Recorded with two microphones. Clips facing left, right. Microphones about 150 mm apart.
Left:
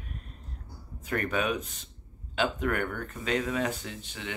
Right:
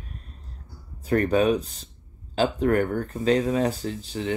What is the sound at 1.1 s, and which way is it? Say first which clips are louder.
Speech: right 9 dB; 35° right (ahead or behind).